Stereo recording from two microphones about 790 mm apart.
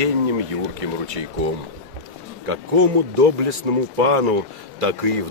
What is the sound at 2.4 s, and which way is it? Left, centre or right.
A man's voice, right.